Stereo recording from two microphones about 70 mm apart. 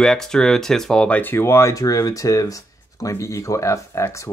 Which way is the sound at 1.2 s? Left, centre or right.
Left.